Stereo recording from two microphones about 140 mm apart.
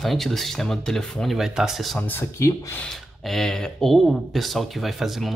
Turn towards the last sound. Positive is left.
turn(degrees=0)  # may be behind; listen again after turning